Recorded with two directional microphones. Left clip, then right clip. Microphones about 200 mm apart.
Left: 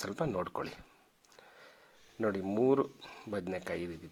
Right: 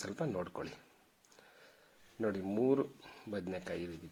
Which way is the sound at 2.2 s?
25° left (ahead or behind).